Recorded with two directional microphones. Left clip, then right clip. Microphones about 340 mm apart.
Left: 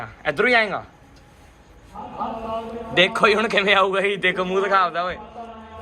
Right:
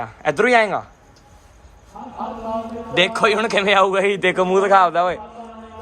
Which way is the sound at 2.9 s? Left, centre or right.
Centre.